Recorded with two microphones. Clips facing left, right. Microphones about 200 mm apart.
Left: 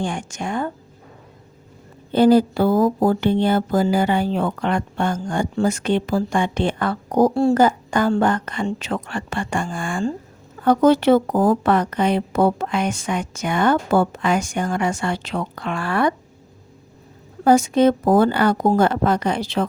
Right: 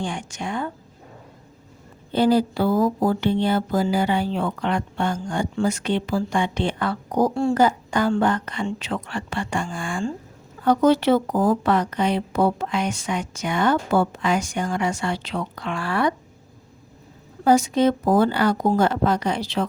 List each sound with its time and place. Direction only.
0.0 s speech: 50° left (ahead or behind)
2.1 s speech: 50° left (ahead or behind)
17.4 s speech: 55° left (ahead or behind)